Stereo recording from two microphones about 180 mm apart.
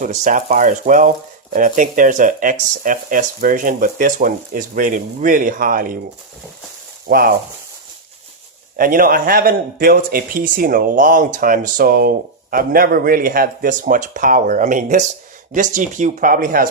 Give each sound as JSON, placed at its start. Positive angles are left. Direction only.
{"t": 0.0, "sound": "a man's voice", "side_deg": -45}
{"t": 7.1, "sound": "a man's voice", "side_deg": -55}
{"t": 8.7, "sound": "a man's voice", "side_deg": -50}